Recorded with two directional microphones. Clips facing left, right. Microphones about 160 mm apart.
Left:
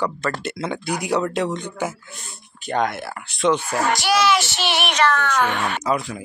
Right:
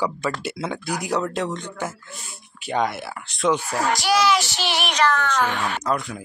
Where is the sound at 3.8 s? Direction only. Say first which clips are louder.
Even; 70° left (ahead or behind).